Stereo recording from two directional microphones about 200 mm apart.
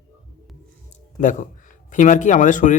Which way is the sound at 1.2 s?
40° left (ahead or behind).